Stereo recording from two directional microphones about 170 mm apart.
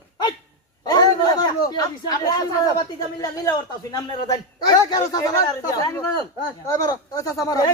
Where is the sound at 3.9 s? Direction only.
25° left (ahead or behind).